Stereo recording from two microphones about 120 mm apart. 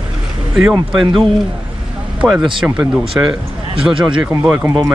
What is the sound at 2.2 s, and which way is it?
Speech, 5° right (ahead or behind).